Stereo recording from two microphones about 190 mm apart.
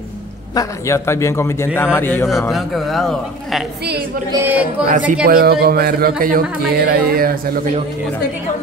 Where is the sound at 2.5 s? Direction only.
Centre (ahead or behind).